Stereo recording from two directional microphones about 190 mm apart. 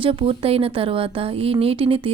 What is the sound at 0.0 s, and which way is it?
Speech, 30° right (ahead or behind).